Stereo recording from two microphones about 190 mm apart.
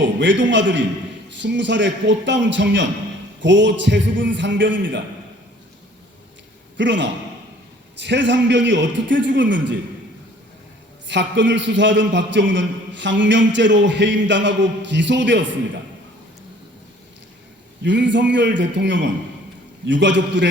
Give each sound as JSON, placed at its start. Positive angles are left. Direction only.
{"t": 0.0, "sound": "a man's voice", "side_deg": -70}
{"t": 6.7, "sound": "a man's voice", "side_deg": -70}
{"t": 11.1, "sound": "a man's voice", "side_deg": -70}
{"t": 17.8, "sound": "a man's voice", "side_deg": -70}